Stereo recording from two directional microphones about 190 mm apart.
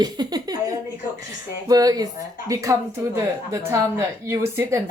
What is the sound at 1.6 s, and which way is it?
A woman's voice, 20° right (ahead or behind).